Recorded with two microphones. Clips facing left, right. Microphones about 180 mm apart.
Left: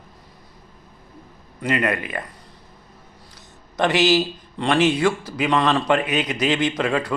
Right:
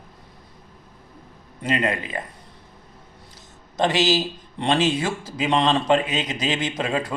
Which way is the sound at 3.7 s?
20° right (ahead or behind).